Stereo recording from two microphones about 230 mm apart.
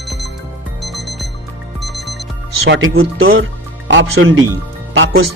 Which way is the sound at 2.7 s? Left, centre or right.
Right.